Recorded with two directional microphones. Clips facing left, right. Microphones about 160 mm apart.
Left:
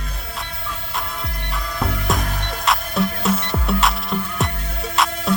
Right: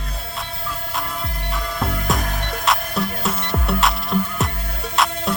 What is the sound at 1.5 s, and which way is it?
Music, centre (ahead or behind).